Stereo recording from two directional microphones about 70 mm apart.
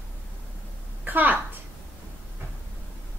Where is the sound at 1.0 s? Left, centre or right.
Right.